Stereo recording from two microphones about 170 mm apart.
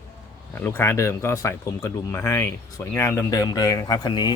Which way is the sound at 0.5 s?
15° left (ahead or behind).